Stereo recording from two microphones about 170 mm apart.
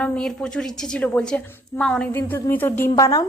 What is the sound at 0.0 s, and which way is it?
A woman's voice, 5° left (ahead or behind).